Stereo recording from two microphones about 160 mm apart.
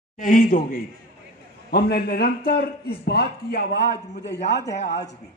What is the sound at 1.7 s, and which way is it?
A man's voice, 75° left (ahead or behind).